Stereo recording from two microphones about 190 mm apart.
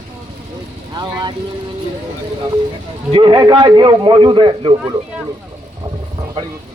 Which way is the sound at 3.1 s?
25° right (ahead or behind).